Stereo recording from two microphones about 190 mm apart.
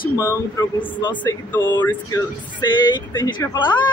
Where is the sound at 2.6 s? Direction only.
25° left (ahead or behind).